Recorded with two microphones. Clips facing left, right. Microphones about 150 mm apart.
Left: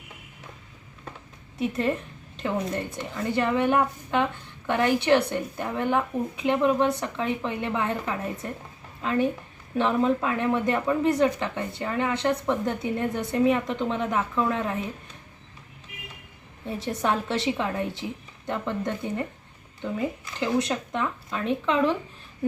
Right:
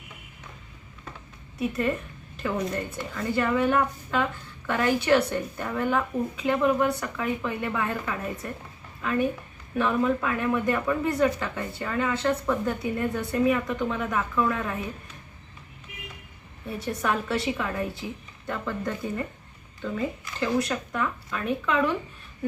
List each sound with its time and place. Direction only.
1.5 s a woman's voice: 30° left (ahead or behind)
16.6 s a woman's voice: 25° left (ahead or behind)